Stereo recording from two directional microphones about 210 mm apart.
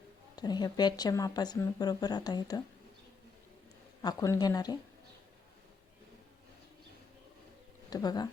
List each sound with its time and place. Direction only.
0.3 s speech: 20° left (ahead or behind)
4.0 s speech: 15° left (ahead or behind)
7.9 s speech: 20° left (ahead or behind)